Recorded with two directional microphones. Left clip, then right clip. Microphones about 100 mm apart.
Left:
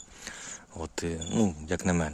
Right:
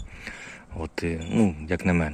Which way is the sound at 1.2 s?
15° left (ahead or behind).